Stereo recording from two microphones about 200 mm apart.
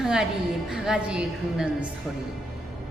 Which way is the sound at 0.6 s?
Centre (ahead or behind).